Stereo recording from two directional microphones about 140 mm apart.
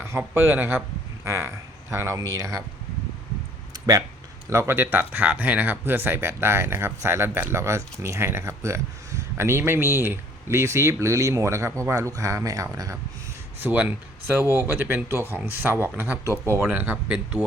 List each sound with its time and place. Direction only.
0.0 s speech: 20° right (ahead or behind)
4.4 s speech: 20° right (ahead or behind)
13.6 s speech: 10° right (ahead or behind)